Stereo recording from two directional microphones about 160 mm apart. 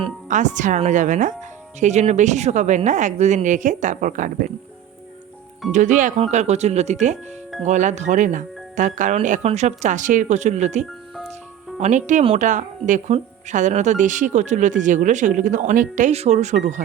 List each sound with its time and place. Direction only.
0.3 s speech: 50° right (ahead or behind)
5.7 s speech: 50° right (ahead or behind)